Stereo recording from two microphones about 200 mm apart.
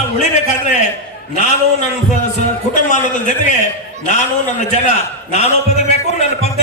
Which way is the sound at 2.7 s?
40° left (ahead or behind).